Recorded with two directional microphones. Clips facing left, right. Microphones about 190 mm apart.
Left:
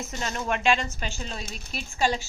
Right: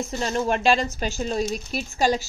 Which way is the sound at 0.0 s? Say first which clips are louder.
Right 7 dB; 35° right (ahead or behind).